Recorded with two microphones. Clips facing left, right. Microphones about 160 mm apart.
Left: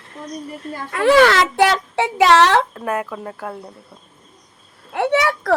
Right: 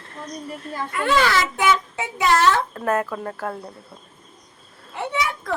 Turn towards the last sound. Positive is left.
turn(degrees=80)